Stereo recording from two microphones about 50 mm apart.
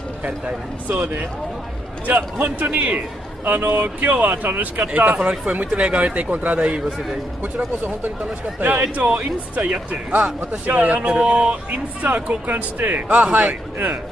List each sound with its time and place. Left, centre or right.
0.2 s speech: right
2.6 s speech: right
5.3 s speech: centre
8.5 s speech: right
12.0 s speech: right